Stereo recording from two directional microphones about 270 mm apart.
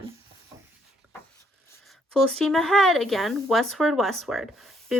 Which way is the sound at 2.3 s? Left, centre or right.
Centre.